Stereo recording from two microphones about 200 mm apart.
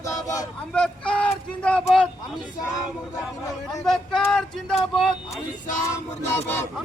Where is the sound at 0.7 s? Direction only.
5° left (ahead or behind).